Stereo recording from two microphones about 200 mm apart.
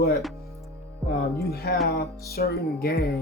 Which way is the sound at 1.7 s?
50° left (ahead or behind).